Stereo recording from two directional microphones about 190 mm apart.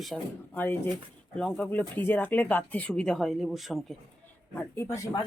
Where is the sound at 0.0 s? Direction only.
Centre (ahead or behind).